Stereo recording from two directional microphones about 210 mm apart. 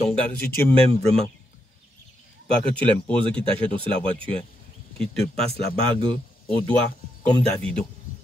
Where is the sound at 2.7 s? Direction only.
5° left (ahead or behind).